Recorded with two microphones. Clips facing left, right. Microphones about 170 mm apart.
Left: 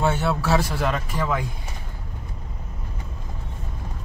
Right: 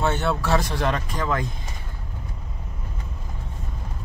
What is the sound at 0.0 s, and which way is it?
A man's voice, 5° left (ahead or behind).